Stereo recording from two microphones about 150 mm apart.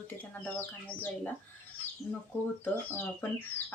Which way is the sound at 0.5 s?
15° left (ahead or behind).